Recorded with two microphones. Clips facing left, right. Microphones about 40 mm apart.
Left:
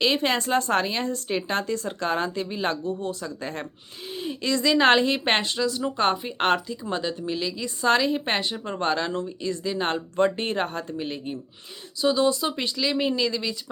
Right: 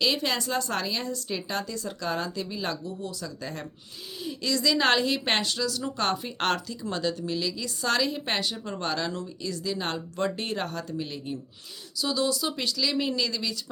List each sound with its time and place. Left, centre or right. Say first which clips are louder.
0.0 s a woman's voice: left 4 dB; left